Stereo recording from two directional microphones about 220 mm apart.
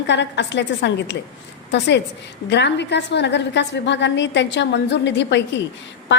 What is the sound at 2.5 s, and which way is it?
A woman's voice, 50° left (ahead or behind).